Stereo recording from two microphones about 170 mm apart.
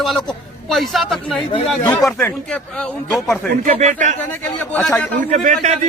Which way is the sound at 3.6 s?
45° right (ahead or behind).